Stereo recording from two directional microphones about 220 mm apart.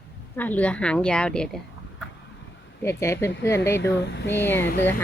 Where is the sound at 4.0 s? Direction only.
50° left (ahead or behind).